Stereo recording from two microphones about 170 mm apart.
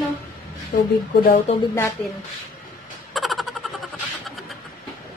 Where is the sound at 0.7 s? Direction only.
65° left (ahead or behind).